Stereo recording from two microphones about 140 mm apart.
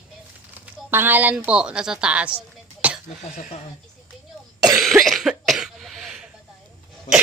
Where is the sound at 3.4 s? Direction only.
60° left (ahead or behind).